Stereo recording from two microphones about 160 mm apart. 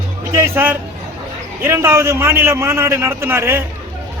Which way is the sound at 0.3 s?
15° right (ahead or behind).